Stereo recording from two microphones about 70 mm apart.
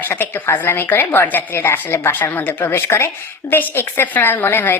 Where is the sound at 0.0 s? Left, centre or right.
Left.